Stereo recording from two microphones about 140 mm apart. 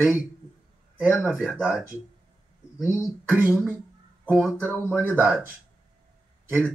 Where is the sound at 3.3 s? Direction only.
15° right (ahead or behind).